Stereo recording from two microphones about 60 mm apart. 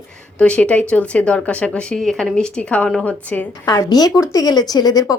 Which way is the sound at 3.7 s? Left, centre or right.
Left.